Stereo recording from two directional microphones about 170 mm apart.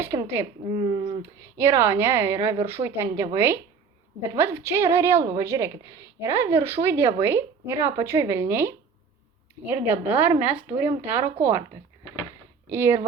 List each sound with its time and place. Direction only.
0.0 s speech: 15° right (ahead or behind)
0.7 s speech: 30° right (ahead or behind)
1.2 s a woman's voice: 15° right (ahead or behind)
12.6 s speech: 15° right (ahead or behind)